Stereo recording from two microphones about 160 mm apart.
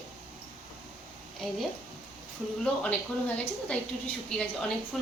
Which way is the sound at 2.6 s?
5° left (ahead or behind).